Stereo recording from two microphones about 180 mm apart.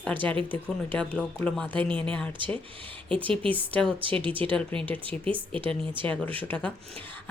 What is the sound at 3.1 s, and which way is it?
Speech, 30° right (ahead or behind).